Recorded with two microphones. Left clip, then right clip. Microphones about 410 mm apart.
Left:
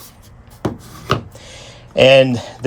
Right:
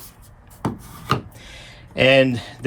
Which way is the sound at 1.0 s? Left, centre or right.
Centre.